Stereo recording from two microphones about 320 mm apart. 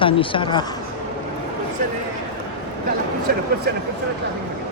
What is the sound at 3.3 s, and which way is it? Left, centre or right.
Speech, right.